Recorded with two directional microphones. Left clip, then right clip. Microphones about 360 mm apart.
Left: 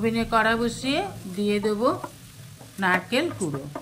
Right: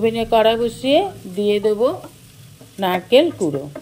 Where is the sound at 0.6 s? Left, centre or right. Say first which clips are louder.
Right 9 dB; centre.